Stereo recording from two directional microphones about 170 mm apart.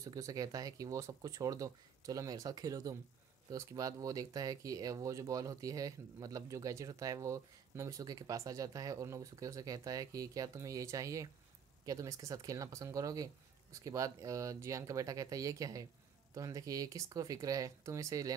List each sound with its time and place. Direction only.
0.0 s speech: 20° right (ahead or behind)